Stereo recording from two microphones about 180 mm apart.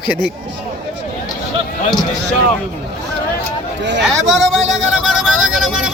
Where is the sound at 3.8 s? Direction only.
75° right (ahead or behind).